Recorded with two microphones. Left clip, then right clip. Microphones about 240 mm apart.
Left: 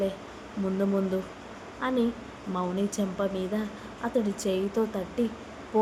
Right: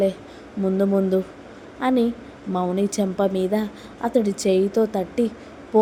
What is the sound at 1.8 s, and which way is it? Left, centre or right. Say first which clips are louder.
A woman's voice: right 7 dB; right.